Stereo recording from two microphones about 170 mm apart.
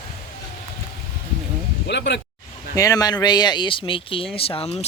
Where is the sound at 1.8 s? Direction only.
90° left.